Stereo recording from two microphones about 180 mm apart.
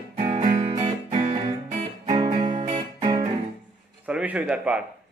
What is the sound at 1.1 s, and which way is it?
Music, 30° right (ahead or behind).